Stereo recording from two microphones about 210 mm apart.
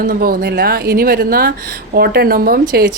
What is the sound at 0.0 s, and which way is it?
Speech, 45° right (ahead or behind).